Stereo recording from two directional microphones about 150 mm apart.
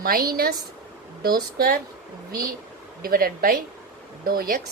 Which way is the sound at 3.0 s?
75° right (ahead or behind).